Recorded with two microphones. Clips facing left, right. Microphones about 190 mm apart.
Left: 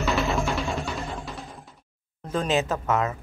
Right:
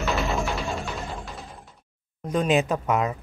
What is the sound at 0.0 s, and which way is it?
Music, centre (ahead or behind).